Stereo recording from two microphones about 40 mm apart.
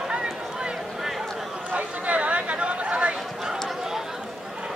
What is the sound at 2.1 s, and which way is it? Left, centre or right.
Chatter, right.